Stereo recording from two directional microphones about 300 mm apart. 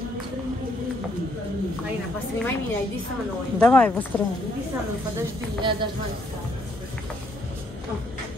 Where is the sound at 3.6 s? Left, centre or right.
Centre.